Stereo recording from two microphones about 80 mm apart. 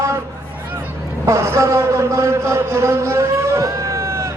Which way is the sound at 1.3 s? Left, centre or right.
Right.